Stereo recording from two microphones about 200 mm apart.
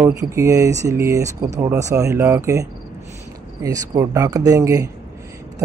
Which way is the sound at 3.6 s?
15° right (ahead or behind).